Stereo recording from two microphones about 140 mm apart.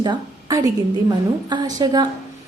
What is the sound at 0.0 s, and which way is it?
A woman's voice, 30° right (ahead or behind).